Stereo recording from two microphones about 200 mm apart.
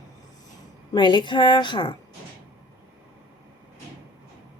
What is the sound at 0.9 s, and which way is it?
A woman's voice, 25° left (ahead or behind).